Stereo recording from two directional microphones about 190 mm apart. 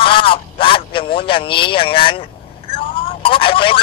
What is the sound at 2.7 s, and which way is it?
Telephone, 30° left (ahead or behind).